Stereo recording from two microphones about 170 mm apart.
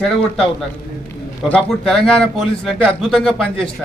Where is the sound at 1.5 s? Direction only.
5° left (ahead or behind).